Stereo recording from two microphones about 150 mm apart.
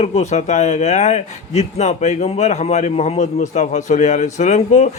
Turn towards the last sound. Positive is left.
turn(degrees=50)  # may be behind; listen again after turning